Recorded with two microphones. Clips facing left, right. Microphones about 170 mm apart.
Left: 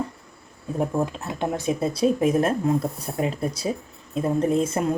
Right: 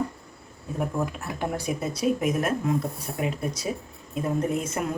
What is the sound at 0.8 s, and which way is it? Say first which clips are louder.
Speech: left 4 dB; 25° left (ahead or behind).